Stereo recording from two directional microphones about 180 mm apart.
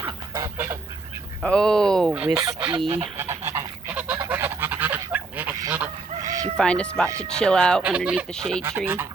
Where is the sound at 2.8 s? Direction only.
30° right (ahead or behind).